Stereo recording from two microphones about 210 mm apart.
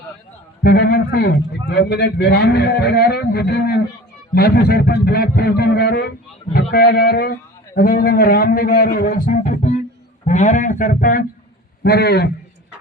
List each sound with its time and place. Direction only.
0.6 s a man's voice: 45° left (ahead or behind)
11.8 s a man's voice: 50° left (ahead or behind)